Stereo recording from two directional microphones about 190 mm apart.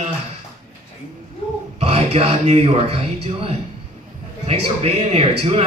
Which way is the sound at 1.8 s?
35° right (ahead or behind).